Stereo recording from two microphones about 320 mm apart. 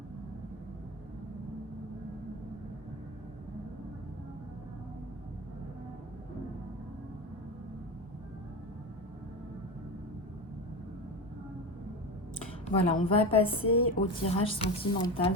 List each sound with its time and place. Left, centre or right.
12.8 s a woman's voice: centre